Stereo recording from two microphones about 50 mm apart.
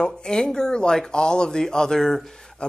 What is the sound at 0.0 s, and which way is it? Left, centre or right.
A woman's voice, centre.